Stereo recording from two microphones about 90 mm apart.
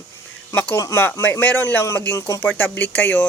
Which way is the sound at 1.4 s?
20° left (ahead or behind).